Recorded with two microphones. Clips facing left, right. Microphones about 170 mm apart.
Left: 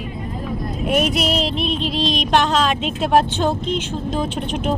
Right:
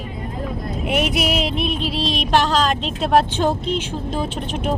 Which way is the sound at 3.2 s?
10° right (ahead or behind).